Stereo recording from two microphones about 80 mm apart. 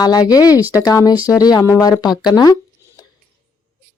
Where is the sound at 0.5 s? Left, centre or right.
Right.